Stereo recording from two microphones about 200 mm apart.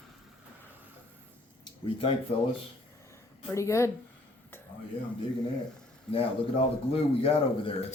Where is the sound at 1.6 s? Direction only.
30° left (ahead or behind).